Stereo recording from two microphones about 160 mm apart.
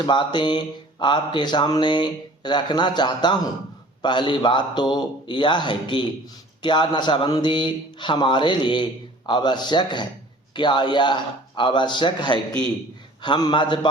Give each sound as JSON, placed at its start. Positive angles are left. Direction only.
{"t": 0.0, "sound": "speech", "side_deg": 30}